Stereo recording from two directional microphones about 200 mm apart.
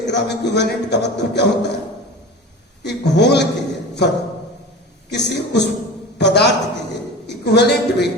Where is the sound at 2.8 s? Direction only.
55° left (ahead or behind).